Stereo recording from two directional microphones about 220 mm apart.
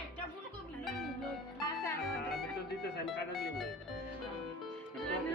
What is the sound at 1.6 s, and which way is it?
Music, 15° left (ahead or behind).